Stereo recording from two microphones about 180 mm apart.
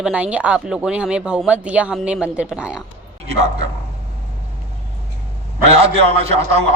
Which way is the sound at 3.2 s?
35° right (ahead or behind).